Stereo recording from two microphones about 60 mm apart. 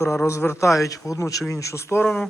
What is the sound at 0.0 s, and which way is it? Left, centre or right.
A man's voice, left.